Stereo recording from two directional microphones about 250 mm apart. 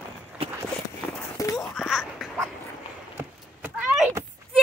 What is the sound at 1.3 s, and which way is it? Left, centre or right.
Wail, centre.